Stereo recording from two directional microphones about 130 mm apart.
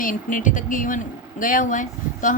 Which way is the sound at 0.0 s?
90° left.